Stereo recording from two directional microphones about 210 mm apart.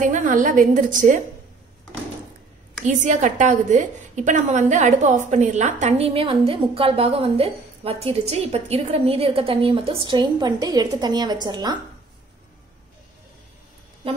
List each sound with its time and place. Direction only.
0.0 s a woman's voice: 40° right (ahead or behind)
2.8 s a woman's voice: 35° right (ahead or behind); by 11.8 s 20° right (ahead or behind)